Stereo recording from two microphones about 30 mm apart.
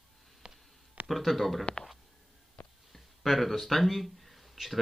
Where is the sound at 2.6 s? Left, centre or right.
Left.